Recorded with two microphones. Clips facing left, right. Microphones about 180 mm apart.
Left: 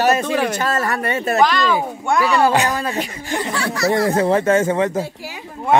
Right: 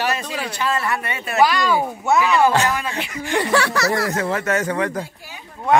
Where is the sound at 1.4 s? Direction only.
10° right (ahead or behind).